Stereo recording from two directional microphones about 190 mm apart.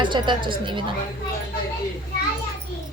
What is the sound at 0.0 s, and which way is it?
Speech, 25° right (ahead or behind).